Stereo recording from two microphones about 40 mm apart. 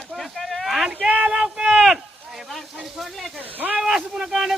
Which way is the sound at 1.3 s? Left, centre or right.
Centre.